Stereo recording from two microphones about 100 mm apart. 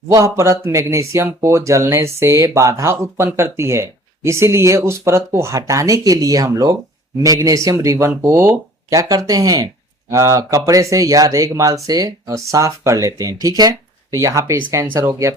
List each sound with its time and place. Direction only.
0.1 s speech: 30° right (ahead or behind)